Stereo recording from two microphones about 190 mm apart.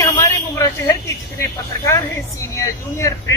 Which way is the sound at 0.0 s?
15° left (ahead or behind).